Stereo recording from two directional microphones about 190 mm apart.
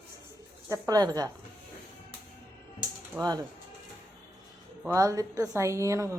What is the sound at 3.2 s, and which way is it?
Speech, 20° right (ahead or behind).